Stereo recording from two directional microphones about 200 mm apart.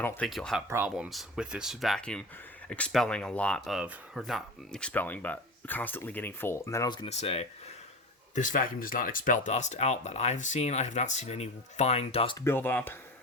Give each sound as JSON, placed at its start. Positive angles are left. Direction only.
{"t": 0.0, "sound": "speech", "side_deg": 10}
{"t": 7.1, "sound": "speech", "side_deg": 30}
{"t": 12.5, "sound": "speech", "side_deg": 10}